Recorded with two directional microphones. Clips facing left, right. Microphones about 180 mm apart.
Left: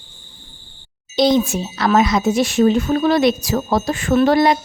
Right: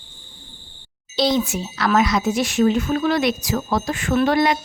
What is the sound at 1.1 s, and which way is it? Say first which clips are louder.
Speech: left 5 dB; 20° left (ahead or behind).